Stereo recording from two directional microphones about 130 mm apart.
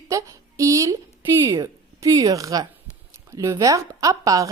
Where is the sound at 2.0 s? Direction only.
25° right (ahead or behind).